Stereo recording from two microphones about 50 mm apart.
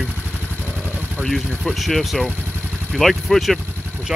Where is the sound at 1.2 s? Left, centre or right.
Centre.